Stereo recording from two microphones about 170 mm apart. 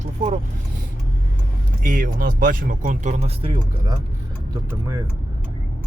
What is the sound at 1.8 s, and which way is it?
Speech, 55° right (ahead or behind).